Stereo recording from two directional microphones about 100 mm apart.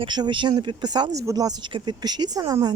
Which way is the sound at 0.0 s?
50° right (ahead or behind).